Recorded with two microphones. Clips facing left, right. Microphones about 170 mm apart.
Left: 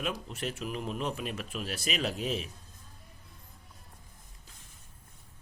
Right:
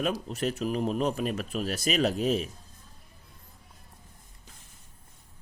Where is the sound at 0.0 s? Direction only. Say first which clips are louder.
Right 6 dB; 40° right (ahead or behind).